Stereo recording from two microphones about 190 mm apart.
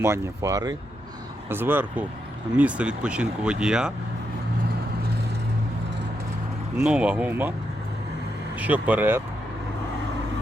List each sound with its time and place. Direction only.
0.0 s speech: 15° right (ahead or behind)
6.7 s speech: 5° right (ahead or behind)
8.6 s speech: 10° right (ahead or behind)